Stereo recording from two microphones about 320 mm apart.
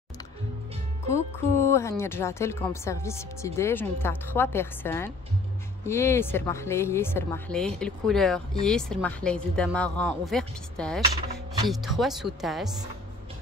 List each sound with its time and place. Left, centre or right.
1.0 s a woman's voice: centre